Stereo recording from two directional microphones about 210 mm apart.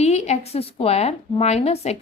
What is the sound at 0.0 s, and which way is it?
A woman's voice, 30° left (ahead or behind).